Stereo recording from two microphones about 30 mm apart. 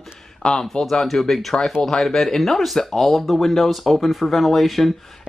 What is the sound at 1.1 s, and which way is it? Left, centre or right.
Speech, centre.